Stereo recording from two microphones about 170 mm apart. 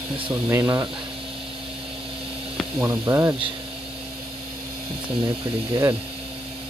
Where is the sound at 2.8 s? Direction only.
15° right (ahead or behind).